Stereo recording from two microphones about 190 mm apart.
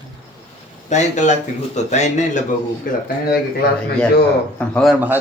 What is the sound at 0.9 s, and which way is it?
Speech, 40° left (ahead or behind).